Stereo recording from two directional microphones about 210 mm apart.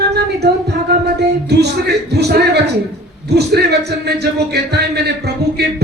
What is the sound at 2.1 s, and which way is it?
A man's voice, 50° right (ahead or behind).